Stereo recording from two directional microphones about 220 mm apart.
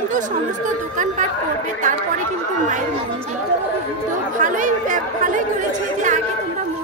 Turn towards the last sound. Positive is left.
turn(degrees=-35)  # may be behind; listen again after turning